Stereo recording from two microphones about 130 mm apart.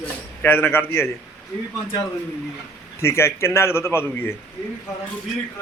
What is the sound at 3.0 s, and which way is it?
A man's voice, 20° left (ahead or behind).